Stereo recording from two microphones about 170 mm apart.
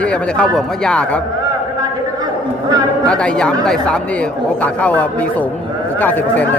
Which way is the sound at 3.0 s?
5° left (ahead or behind).